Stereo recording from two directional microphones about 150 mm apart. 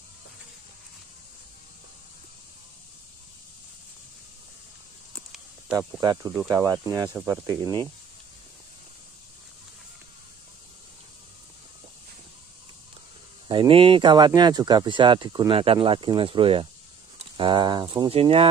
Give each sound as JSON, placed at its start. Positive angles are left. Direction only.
{"t": 5.9, "sound": "speech", "side_deg": -25}
{"t": 13.5, "sound": "speech", "side_deg": -35}